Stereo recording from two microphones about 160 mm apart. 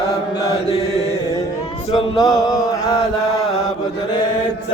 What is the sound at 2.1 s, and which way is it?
Mantra, 25° left (ahead or behind).